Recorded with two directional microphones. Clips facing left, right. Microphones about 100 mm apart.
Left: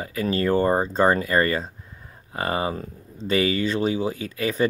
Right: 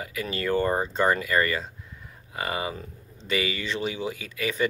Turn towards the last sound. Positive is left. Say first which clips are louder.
# left 4 dB
turn(degrees=35)  # may be behind; listen again after turning